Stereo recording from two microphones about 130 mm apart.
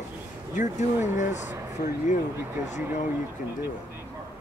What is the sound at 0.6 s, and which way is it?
Speech, 75° left (ahead or behind).